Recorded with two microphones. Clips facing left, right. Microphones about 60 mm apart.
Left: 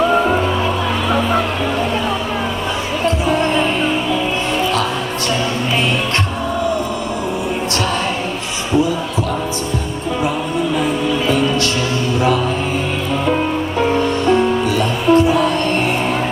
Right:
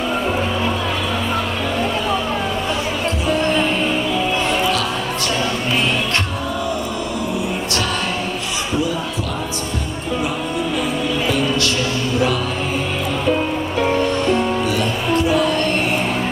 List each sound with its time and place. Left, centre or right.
3.2 s music: left
14.3 s music: left